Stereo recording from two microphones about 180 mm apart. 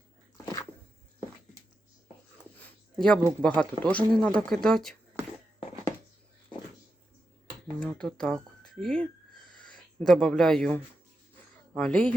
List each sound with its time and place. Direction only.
0.4 s dog: 20° left (ahead or behind)
2.6 s a sound: 5° left (ahead or behind)
3.4 s speech: 5° left (ahead or behind)
7.8 s speech: 5° left (ahead or behind)